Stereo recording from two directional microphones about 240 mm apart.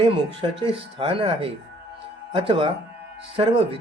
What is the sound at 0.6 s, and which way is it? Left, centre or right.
Speech, right.